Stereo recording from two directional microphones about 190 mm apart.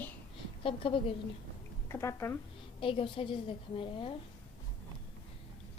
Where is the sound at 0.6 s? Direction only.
30° left (ahead or behind).